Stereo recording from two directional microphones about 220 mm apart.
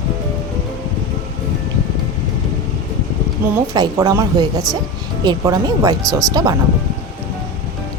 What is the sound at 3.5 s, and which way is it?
Speech, 15° right (ahead or behind).